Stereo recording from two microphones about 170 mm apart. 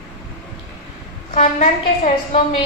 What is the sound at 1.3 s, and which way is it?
A woman's voice, 45° left (ahead or behind).